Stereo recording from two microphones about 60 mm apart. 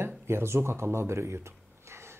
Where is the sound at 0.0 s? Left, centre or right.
Right.